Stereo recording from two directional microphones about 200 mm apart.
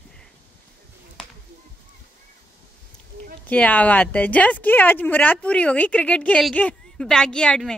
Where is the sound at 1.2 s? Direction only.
5° left (ahead or behind).